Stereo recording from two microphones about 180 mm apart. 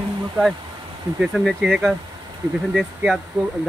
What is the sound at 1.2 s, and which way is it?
Speech, centre (ahead or behind).